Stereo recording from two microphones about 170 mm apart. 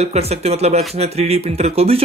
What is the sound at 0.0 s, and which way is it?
Speech, 40° right (ahead or behind).